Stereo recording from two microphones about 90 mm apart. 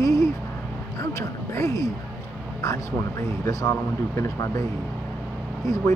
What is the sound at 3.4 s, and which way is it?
Speech, 35° left (ahead or behind).